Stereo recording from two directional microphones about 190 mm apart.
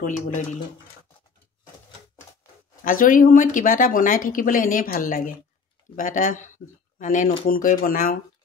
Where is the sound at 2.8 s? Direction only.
45° left (ahead or behind).